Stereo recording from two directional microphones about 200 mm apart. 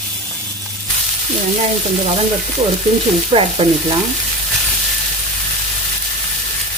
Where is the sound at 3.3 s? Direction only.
25° right (ahead or behind).